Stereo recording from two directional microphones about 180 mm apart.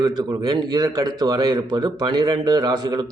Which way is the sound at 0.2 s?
20° right (ahead or behind).